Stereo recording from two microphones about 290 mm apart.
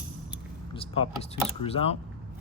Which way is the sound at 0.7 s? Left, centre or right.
Centre.